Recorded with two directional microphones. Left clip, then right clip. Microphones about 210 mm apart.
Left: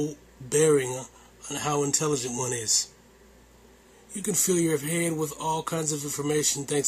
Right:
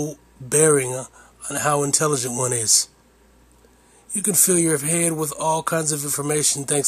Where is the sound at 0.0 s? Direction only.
40° right (ahead or behind).